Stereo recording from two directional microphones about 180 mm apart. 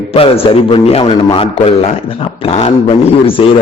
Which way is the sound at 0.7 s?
30° left (ahead or behind).